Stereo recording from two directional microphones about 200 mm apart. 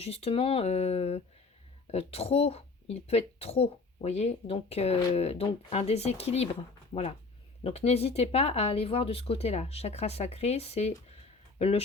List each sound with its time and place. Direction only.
0.0 s speech: 30° left (ahead or behind)
7.6 s speech: 30° left (ahead or behind)